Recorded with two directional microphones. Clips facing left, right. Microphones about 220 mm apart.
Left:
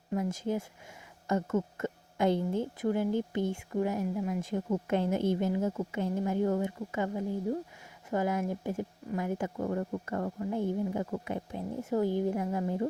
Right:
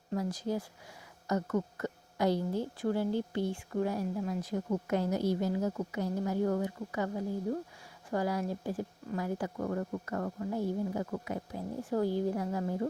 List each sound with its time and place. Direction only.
0.1 s a woman's voice: 20° left (ahead or behind)
8.1 s a woman's voice: 20° left (ahead or behind)